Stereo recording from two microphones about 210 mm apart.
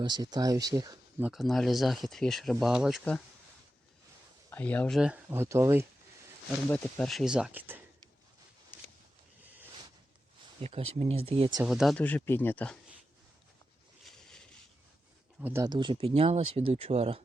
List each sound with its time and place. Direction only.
0.0 s speech: 20° right (ahead or behind)
1.3 s speech: centre (ahead or behind)
4.4 s speech: 10° left (ahead or behind); by 5.8 s 15° right (ahead or behind)
6.7 s speech: 5° left (ahead or behind)
10.6 s speech: 30° right (ahead or behind)
11.6 s speech: centre (ahead or behind)
14.0 s a sound: 5° left (ahead or behind)
15.4 s speech: 10° right (ahead or behind); by 17.2 s 30° right (ahead or behind)